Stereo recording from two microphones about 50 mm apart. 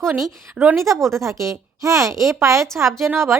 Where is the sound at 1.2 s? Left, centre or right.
Right.